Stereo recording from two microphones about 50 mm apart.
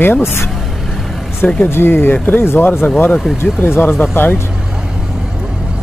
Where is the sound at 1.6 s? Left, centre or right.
Left.